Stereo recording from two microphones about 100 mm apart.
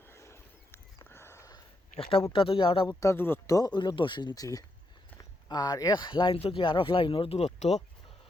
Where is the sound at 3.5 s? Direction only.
45° left (ahead or behind).